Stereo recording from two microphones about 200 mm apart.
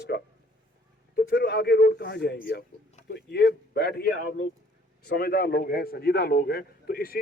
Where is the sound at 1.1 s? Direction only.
55° left (ahead or behind).